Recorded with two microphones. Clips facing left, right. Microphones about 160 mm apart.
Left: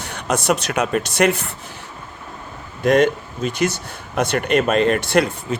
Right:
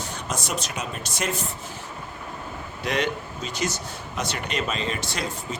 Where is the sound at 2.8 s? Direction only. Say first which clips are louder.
Left 11 dB; 50° left (ahead or behind).